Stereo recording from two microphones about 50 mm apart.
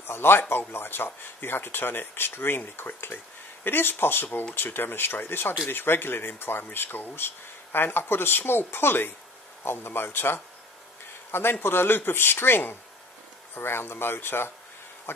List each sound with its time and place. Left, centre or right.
0.0 s speech: left
11.6 s speech: left